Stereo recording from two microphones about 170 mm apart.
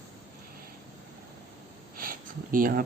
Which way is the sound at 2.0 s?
55° right (ahead or behind).